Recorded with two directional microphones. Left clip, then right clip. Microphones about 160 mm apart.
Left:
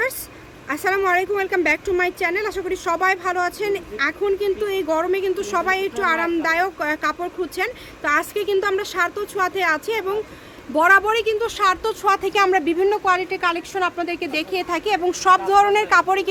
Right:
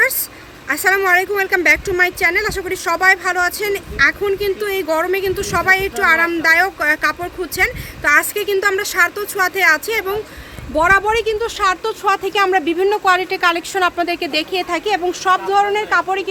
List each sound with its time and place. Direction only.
0.7 s speech: 5° left (ahead or behind)